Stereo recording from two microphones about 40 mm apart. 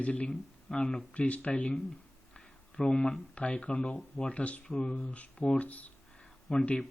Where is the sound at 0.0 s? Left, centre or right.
Left.